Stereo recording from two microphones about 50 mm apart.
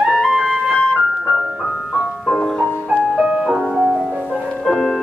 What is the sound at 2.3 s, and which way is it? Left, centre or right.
Music, centre.